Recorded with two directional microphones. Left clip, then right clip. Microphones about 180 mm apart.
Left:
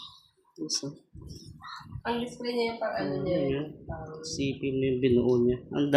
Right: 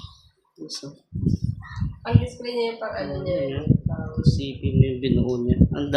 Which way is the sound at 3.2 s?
5° left (ahead or behind).